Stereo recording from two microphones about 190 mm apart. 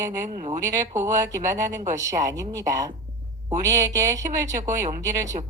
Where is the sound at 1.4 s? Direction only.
40° right (ahead or behind).